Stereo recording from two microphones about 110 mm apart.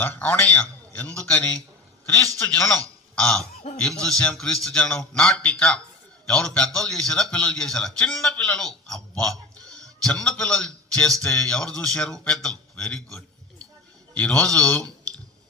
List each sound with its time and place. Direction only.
0.0 s a man's voice: 15° left (ahead or behind)
3.2 s a man's voice: 5° left (ahead or behind)